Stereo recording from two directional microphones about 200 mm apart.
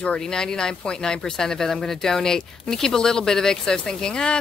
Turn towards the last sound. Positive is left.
turn(degrees=5)  # may be behind; listen again after turning